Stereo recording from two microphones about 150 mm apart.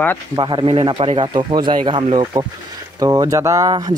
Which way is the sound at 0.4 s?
35° right (ahead or behind).